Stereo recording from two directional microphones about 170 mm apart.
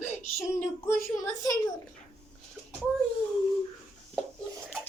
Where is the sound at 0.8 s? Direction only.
20° left (ahead or behind).